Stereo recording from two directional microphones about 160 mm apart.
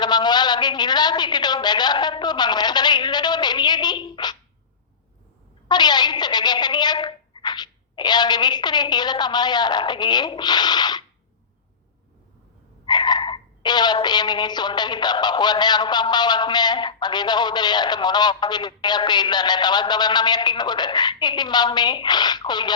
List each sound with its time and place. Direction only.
0.0 s a woman's voice: 25° left (ahead or behind)
5.6 s speech: 25° left (ahead or behind)
12.8 s speech: 25° left (ahead or behind)